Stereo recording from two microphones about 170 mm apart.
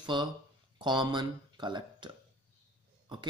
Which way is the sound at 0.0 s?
25° right (ahead or behind).